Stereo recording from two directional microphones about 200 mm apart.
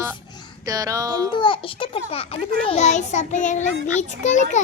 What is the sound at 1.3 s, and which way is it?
A child's voice, 25° left (ahead or behind).